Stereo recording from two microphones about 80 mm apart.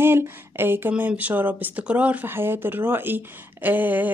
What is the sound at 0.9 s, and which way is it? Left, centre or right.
Speech, centre.